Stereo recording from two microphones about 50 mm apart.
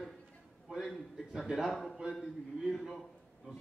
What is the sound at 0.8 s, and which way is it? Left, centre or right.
Speech, centre.